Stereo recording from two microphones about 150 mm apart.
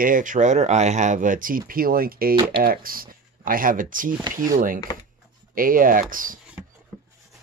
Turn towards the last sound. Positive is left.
turn(degrees=-65)  # may be behind; listen again after turning